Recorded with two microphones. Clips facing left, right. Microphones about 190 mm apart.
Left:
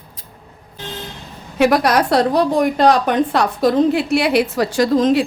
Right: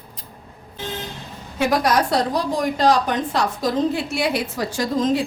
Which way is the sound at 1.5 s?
70° left (ahead or behind).